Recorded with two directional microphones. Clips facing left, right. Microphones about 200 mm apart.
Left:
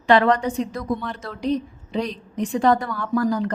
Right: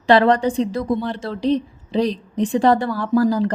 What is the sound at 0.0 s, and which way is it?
A woman's voice, 30° right (ahead or behind).